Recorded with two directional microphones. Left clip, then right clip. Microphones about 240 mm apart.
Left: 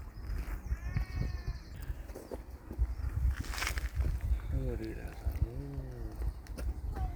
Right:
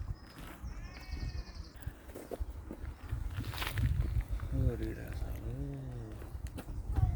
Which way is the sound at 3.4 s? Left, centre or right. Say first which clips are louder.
Left 2 dB; right.